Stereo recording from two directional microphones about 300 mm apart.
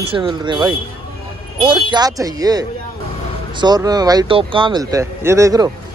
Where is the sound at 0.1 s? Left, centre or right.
Centre.